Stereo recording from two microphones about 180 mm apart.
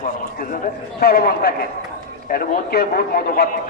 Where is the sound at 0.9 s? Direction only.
60° left (ahead or behind).